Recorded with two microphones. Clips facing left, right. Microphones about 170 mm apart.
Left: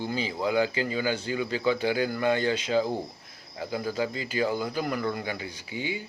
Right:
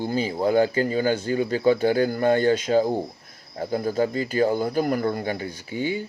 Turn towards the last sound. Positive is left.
turn(degrees=-50)  # may be behind; listen again after turning